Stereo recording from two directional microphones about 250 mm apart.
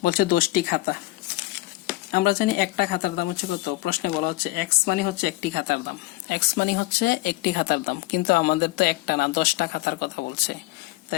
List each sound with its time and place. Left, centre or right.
0.0 s speech: left
2.1 s speech: left